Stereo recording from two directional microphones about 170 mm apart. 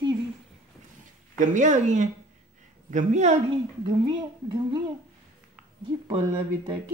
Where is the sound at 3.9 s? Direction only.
25° right (ahead or behind).